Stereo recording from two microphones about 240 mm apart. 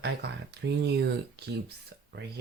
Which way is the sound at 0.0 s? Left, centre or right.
Right.